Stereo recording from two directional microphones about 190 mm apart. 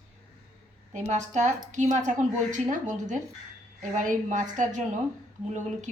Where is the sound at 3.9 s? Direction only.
40° right (ahead or behind).